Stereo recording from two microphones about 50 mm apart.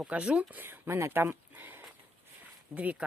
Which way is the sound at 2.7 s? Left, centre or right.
Right.